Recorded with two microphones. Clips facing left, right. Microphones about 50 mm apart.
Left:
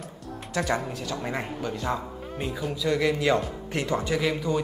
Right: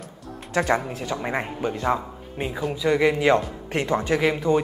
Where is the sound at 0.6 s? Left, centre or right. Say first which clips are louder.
Right 5 dB; centre.